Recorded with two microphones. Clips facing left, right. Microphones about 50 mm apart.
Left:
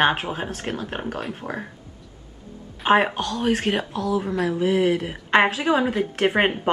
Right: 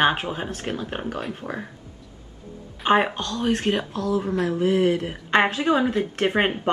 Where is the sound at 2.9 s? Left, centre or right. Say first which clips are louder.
Left 1 dB; centre.